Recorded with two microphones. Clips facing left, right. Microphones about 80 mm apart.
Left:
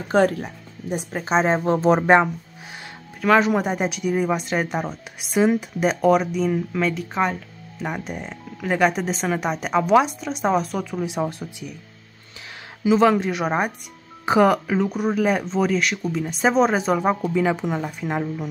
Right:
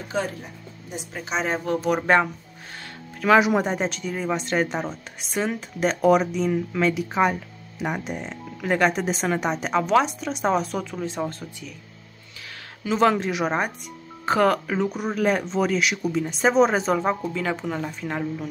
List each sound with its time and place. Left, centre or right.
0.1 s speech: left
0.9 s a woman's voice: left; by 2.3 s centre
3.3 s speech: centre
3.6 s speech: centre
12.8 s speech: centre